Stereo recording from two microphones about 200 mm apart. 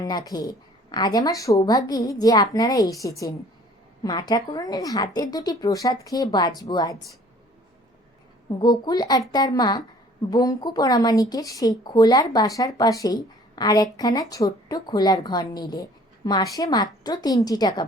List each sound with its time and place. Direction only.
0.0 s a woman's voice: 20° left (ahead or behind)
8.4 s speech: 20° left (ahead or behind)